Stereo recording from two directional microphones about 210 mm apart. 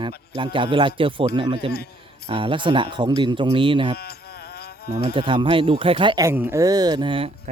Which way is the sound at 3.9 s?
50° left (ahead or behind).